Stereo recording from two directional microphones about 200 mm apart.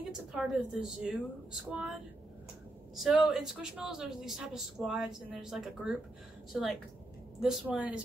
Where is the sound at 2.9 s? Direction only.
Centre (ahead or behind).